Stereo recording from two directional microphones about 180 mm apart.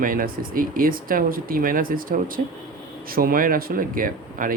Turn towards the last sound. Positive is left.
turn(degrees=-50)  # may be behind; listen again after turning